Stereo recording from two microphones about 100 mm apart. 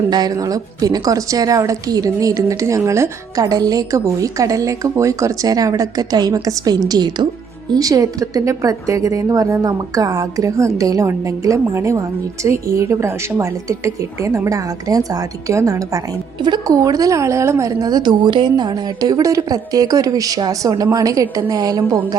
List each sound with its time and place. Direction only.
0.1 s a woman's voice: 40° right (ahead or behind)
3.4 s a woman's voice: 40° right (ahead or behind)